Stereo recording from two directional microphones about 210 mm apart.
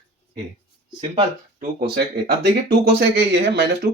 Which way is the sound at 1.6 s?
50° right (ahead or behind).